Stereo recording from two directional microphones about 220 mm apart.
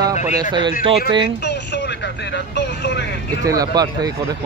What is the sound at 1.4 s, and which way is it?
Speech, 50° left (ahead or behind).